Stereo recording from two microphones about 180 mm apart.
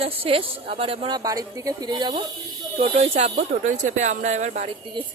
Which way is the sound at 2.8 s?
35° right (ahead or behind).